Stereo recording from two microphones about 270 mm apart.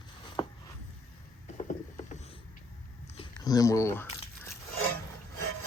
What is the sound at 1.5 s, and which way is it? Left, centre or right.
Mechanisms, left.